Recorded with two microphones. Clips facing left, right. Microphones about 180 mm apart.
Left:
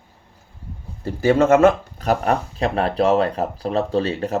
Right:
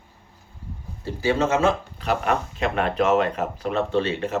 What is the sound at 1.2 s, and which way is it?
Speech, 50° left (ahead or behind).